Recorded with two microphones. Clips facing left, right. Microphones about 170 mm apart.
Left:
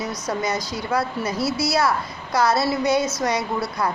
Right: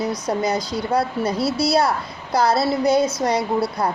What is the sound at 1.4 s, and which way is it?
Speech, 60° right (ahead or behind).